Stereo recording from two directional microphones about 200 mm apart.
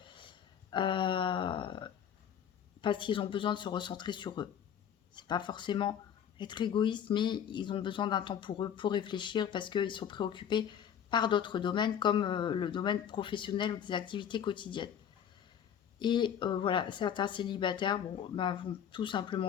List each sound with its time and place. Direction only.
0.0 s a sound: 25° left (ahead or behind)
2.8 s speech: 25° left (ahead or behind)
16.0 s speech: 25° left (ahead or behind)